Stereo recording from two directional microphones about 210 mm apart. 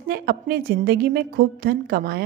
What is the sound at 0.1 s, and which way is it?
A woman's voice, 45° right (ahead or behind).